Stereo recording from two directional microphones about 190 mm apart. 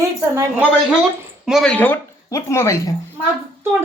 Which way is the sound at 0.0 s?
15° right (ahead or behind).